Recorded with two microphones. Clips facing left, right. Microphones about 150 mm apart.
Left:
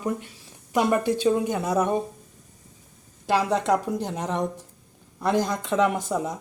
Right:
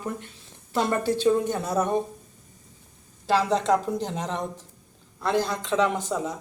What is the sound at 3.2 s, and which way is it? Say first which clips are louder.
Speech: even; 15° left (ahead or behind).